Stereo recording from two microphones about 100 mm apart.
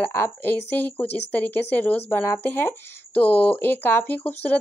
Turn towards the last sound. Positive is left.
turn(degrees=20)  # may be behind; listen again after turning